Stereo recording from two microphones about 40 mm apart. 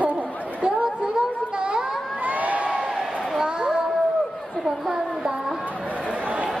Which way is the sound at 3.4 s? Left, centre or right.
Centre.